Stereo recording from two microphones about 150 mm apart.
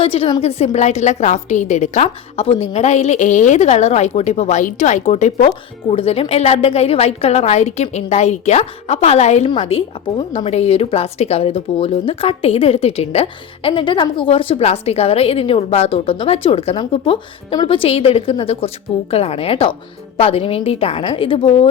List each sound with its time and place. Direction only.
0.0 s a woman's voice: 40° left (ahead or behind)